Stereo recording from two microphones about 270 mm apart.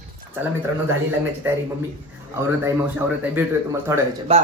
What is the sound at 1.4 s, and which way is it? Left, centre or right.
Speech, centre.